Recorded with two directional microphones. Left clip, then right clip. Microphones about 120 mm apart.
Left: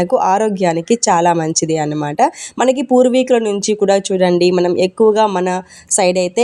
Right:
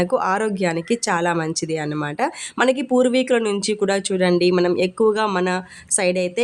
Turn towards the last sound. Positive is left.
turn(degrees=35)  # may be behind; listen again after turning